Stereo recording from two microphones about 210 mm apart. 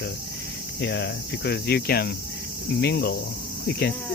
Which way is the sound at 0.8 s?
55° left (ahead or behind).